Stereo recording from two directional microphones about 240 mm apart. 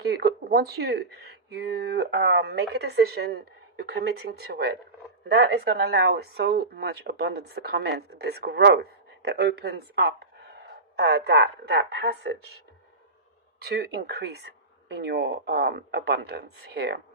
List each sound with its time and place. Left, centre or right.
0.0 s speech: right
13.6 s speech: right